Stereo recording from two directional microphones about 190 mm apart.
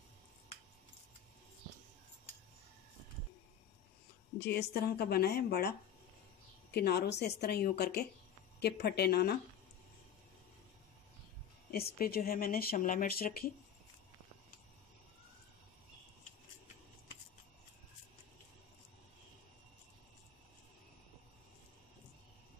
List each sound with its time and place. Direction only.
4.4 s speech: 60° left (ahead or behind)
11.7 s speech: 55° left (ahead or behind)